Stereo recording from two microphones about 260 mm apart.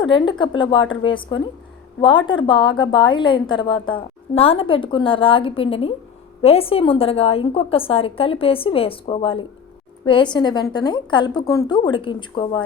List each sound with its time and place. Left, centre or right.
0.0 s a woman's voice: centre
2.0 s a woman's voice: centre